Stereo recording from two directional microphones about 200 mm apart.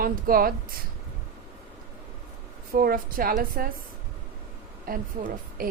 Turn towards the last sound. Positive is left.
turn(degrees=-45)  # may be behind; listen again after turning